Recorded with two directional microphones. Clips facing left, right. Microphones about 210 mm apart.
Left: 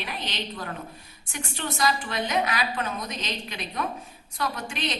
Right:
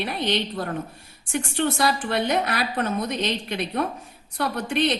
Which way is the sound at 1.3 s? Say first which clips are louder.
Right 9 dB; 55° right (ahead or behind).